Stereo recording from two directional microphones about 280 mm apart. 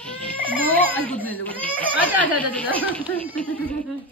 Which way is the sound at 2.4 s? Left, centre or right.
Centre.